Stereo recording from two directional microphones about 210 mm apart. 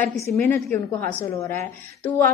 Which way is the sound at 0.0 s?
10° left (ahead or behind).